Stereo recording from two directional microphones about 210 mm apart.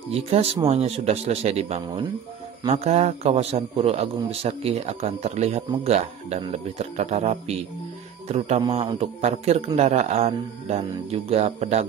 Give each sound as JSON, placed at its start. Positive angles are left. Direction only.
{"t": 0.1, "sound": "a man's voice", "side_deg": -30}
{"t": 1.8, "sound": "speech", "side_deg": -15}
{"t": 2.6, "sound": "a man's voice", "side_deg": -30}